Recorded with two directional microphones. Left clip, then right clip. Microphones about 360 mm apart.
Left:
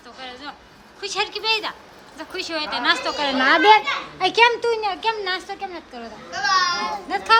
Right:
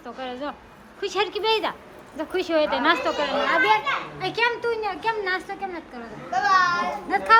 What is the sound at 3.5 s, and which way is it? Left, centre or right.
A child's voice, left.